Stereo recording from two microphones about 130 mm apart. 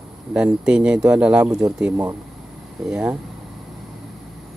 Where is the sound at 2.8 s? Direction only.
5° right (ahead or behind).